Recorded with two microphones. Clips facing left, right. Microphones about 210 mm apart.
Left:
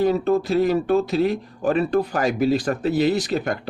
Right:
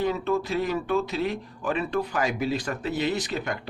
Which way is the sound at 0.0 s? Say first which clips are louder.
Left 6 dB; 40° left (ahead or behind).